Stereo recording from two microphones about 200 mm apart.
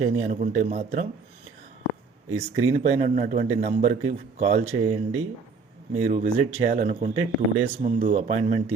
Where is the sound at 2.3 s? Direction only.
30° right (ahead or behind).